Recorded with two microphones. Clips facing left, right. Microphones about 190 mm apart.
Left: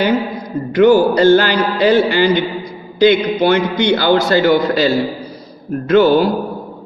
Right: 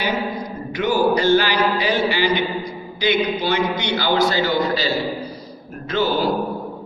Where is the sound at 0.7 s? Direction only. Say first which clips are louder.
Left 8 dB; 55° left (ahead or behind).